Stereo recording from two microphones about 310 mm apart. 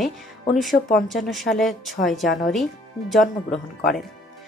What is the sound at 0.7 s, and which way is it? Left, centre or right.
Speech, left.